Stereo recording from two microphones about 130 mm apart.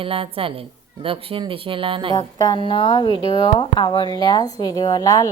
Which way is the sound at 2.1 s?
30° left (ahead or behind).